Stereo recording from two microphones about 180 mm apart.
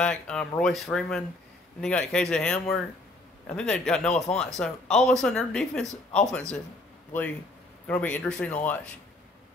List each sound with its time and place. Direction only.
0.0 s speech: 5° left (ahead or behind)
7.8 s speech: 10° left (ahead or behind)